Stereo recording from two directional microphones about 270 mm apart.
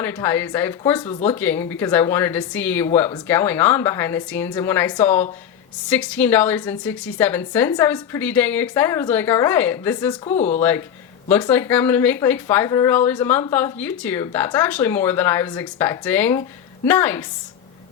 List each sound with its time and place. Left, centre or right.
0.0 s speech: centre
10.2 s speech: left
10.6 s speech: centre